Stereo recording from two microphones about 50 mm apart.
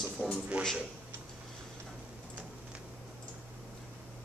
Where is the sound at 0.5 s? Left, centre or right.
Right.